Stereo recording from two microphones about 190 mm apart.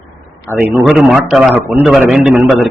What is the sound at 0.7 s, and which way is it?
A man's voice, centre (ahead or behind).